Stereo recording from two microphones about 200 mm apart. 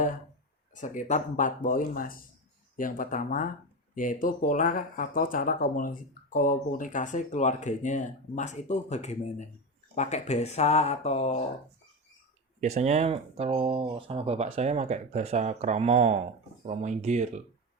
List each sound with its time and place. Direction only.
0.7 s speech: 40° left (ahead or behind)
12.5 s speech: 35° right (ahead or behind)